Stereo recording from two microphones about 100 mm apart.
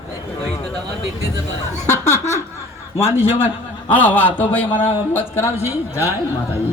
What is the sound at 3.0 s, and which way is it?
Speech, 25° left (ahead or behind).